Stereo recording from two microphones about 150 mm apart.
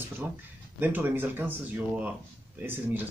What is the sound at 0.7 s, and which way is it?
Speech, 10° right (ahead or behind).